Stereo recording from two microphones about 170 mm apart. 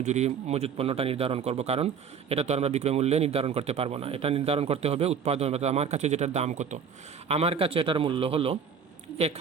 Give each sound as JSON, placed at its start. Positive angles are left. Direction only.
{"t": 0.0, "sound": "a man's voice", "side_deg": -40}